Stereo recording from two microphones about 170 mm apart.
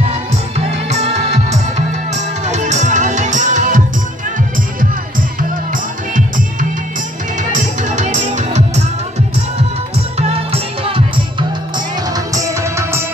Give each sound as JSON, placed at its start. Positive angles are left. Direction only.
{"t": 0.6, "sound": "music", "side_deg": -40}
{"t": 7.9, "sound": "music", "side_deg": -45}
{"t": 10.1, "sound": "music", "side_deg": -35}
{"t": 12.4, "sound": "music", "side_deg": -15}